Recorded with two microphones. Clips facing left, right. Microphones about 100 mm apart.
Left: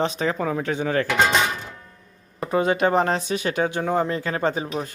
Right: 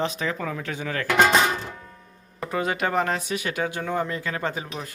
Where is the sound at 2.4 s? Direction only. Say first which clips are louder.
Left 5 dB; 30° left (ahead or behind).